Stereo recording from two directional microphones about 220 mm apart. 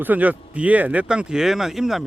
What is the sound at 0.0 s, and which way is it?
Speech, 5° right (ahead or behind).